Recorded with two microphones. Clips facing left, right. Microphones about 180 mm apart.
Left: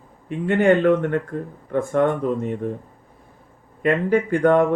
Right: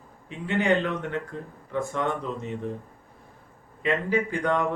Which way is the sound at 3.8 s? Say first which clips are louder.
Left 6 dB; 50° left (ahead or behind).